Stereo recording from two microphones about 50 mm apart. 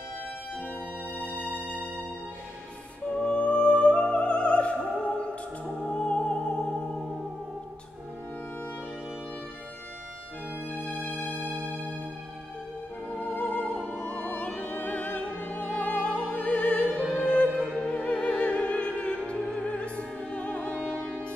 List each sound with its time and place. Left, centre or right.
0.7 s music: right
3.2 s music: left
11.1 s music: left
13.1 s music: left
14.7 s opera: left
16.3 s music: left